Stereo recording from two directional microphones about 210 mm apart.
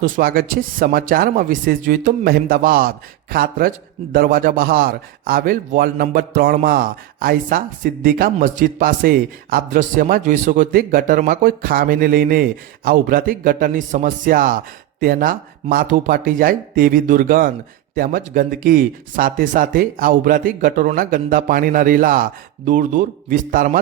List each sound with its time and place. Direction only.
0.0 s speech: 45° right (ahead or behind)